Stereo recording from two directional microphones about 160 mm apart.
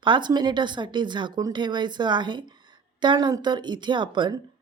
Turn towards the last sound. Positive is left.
turn(degrees=-30)  # may be behind; listen again after turning